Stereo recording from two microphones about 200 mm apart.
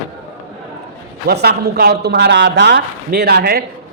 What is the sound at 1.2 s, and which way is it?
A man's voice, 50° right (ahead or behind).